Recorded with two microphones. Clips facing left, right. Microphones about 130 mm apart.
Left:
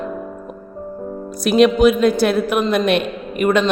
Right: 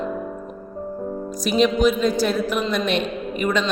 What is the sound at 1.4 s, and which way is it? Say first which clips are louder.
A man's voice: left 6 dB; 65° left (ahead or behind).